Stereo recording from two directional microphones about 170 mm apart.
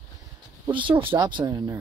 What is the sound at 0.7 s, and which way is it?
Speech, 30° right (ahead or behind).